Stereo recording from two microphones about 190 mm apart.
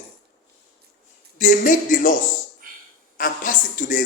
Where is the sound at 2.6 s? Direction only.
45° right (ahead or behind).